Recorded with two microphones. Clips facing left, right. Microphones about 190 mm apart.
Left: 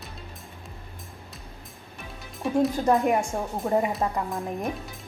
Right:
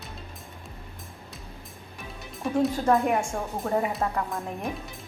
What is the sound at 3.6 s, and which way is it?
Speech, 15° left (ahead or behind).